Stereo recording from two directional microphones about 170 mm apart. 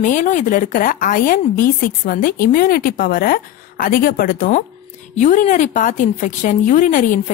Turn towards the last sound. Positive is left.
turn(degrees=50)  # may be behind; listen again after turning